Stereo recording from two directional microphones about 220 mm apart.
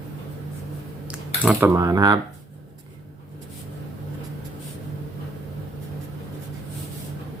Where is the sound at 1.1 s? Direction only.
5° right (ahead or behind).